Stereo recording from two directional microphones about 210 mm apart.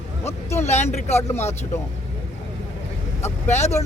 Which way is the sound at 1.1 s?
10° left (ahead or behind).